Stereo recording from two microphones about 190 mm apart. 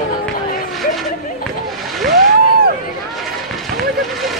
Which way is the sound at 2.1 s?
55° right (ahead or behind).